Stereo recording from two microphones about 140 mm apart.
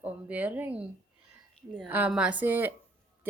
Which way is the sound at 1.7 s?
10° right (ahead or behind).